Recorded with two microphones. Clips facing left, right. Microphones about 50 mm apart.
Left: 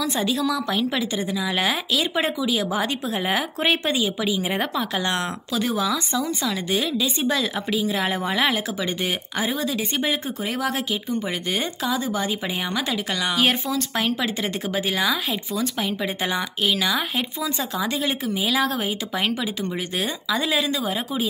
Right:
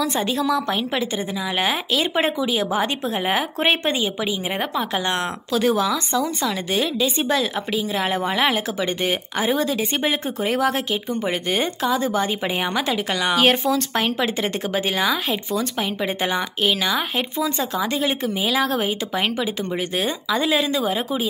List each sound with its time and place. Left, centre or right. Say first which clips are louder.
0.2 s a woman's voice: right 2 dB; right
3.5 s a woman's voice: right 1 dB; right
5.5 s speech: right 5 dB; centre
7.2 s a woman's voice: right 2 dB; centre
12.7 s a woman's voice: right 3 dB; right
14.2 s speech: right 3 dB; centre
14.9 s a woman's voice: right 1 dB; centre
18.3 s speech: right 1 dB; centre